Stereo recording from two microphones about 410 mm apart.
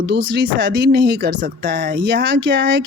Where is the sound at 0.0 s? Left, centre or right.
Right.